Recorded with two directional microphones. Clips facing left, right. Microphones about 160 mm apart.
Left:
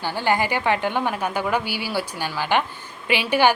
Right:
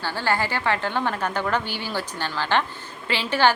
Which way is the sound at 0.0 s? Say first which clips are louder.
Left 3 dB; 15° left (ahead or behind).